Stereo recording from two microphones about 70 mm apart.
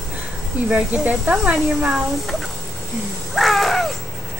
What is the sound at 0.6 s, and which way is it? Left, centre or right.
Speech, centre.